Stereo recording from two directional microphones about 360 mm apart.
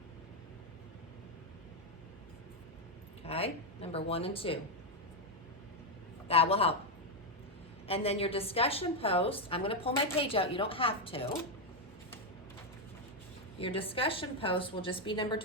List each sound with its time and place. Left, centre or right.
3.2 s a woman's voice: centre
6.2 s a woman's voice: centre
7.9 s a woman's voice: centre
13.6 s a woman's voice: centre